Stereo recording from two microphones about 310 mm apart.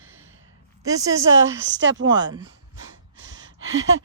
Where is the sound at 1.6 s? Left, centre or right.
Right.